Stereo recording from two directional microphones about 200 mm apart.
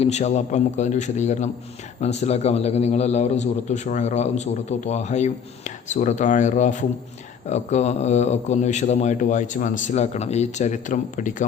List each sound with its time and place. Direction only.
0.0 s a man's voice: 35° left (ahead or behind)